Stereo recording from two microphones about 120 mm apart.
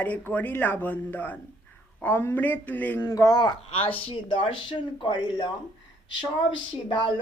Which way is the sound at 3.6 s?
50° left (ahead or behind).